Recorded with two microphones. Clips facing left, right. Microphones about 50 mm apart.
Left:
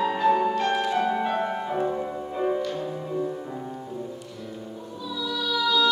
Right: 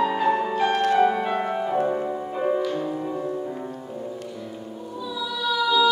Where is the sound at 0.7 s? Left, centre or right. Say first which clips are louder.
Right 4 dB; right.